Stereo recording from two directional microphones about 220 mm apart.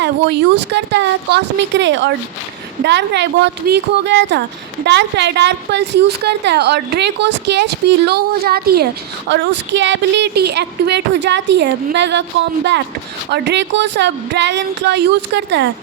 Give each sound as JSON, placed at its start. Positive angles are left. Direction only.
{"t": 0.0, "sound": "a woman's voice", "side_deg": -50}